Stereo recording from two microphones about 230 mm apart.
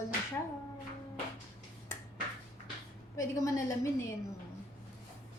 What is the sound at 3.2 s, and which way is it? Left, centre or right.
Speech, centre.